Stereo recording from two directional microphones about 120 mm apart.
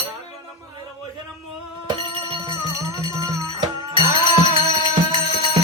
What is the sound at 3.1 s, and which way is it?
Music, 25° right (ahead or behind).